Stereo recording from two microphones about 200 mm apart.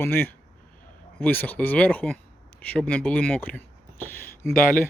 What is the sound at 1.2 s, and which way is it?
Speech, 10° left (ahead or behind).